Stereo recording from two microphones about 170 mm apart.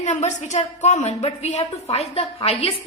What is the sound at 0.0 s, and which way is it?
A woman's voice, 45° left (ahead or behind).